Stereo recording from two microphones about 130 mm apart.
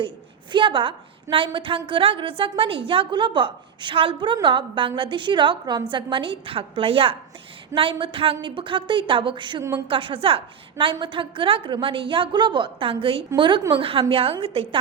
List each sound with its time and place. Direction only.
0.5 s a woman's voice: 40° right (ahead or behind)